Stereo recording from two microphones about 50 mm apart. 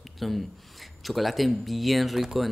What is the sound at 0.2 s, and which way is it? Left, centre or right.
Speech, centre.